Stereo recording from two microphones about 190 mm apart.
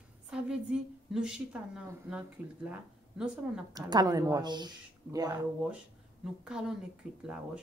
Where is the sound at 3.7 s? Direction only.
20° right (ahead or behind).